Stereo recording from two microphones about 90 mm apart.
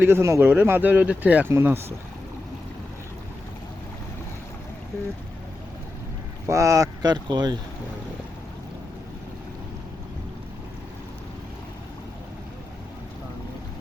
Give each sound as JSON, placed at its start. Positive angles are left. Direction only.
{"t": 0.0, "sound": "speech", "side_deg": -30}
{"t": 1.5, "sound": "speech", "side_deg": -30}
{"t": 6.5, "sound": "speech", "side_deg": -35}